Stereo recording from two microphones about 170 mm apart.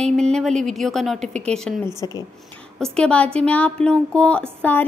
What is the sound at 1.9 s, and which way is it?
Speech, 20° left (ahead or behind).